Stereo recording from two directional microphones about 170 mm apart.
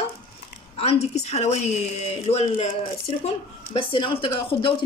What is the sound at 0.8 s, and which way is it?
Speech, 40° left (ahead or behind).